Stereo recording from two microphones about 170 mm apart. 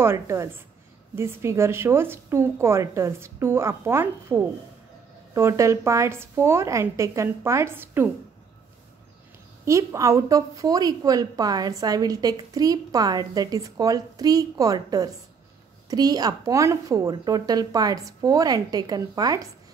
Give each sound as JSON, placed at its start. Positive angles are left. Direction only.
{"t": 0.0, "sound": "a woman's voice", "side_deg": -15}
{"t": 9.7, "sound": "a woman's voice", "side_deg": -15}